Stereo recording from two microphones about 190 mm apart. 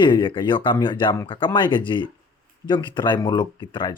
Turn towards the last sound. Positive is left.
turn(degrees=25)  # may be behind; listen again after turning